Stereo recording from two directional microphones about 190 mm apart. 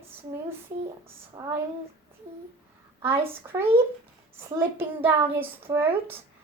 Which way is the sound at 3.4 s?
10° right (ahead or behind).